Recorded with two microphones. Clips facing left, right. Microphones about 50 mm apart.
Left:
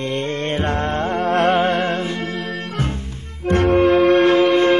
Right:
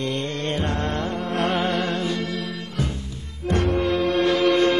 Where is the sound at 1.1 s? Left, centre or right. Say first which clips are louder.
Left 11 dB; left.